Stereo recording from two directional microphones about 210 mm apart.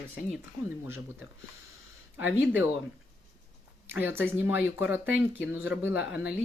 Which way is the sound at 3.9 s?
10° right (ahead or behind).